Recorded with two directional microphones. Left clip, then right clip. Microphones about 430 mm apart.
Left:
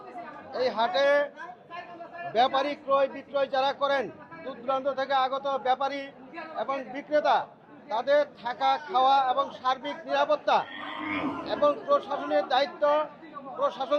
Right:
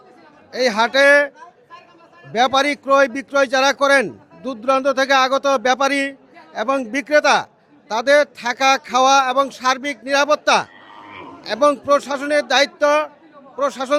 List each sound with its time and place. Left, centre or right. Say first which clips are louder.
0.5 s a man's voice: right 10 dB; right
2.3 s a man's voice: right 9 dB; right